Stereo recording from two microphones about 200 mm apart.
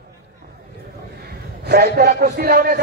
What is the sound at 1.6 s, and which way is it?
A man's voice, 55° right (ahead or behind).